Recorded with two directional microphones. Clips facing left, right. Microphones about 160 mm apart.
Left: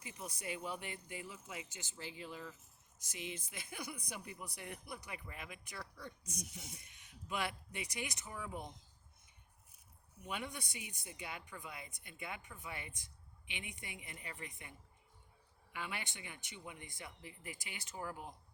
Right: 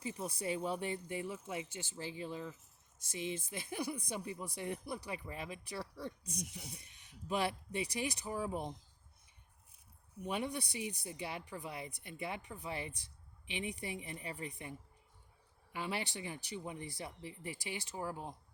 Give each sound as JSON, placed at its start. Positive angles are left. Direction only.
{"t": 0.0, "sound": "speech", "side_deg": -30}
{"t": 10.2, "sound": "speech", "side_deg": -30}